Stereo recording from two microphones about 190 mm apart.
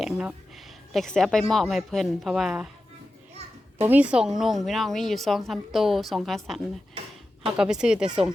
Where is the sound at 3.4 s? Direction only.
35° right (ahead or behind).